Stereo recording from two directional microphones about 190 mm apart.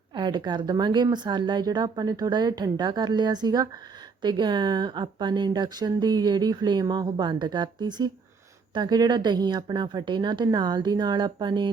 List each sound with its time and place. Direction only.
0.1 s speech: 25° right (ahead or behind)